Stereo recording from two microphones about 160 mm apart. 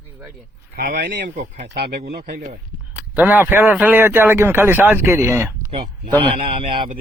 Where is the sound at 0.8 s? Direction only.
70° right (ahead or behind); by 2.4 s 85° right.